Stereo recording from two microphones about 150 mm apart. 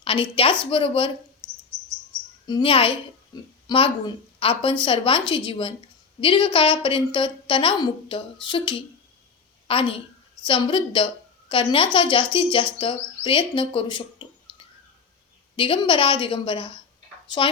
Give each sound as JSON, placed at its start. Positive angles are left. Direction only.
{"t": 0.0, "sound": "a woman's voice", "side_deg": 40}
{"t": 2.5, "sound": "a woman's voice", "side_deg": 35}